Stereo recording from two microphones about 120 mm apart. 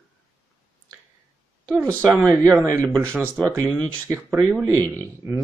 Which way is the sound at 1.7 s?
25° right (ahead or behind).